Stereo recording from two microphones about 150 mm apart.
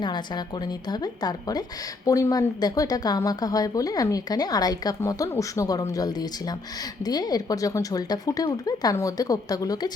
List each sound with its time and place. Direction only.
0.0 s speech: 30° left (ahead or behind)